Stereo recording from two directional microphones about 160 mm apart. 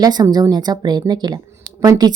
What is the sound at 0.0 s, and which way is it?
Speech, 25° right (ahead or behind).